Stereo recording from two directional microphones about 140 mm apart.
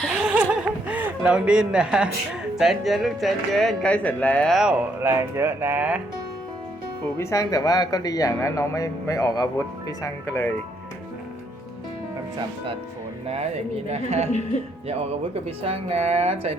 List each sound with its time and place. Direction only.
0.1 s chuckle: 10° right (ahead or behind)
2.6 s speech: centre (ahead or behind)
4.5 s speech: 5° right (ahead or behind)
7.2 s a man's voice: 20° left (ahead or behind)
13.2 s speech: 50° right (ahead or behind)
15.4 s speech: 45° right (ahead or behind)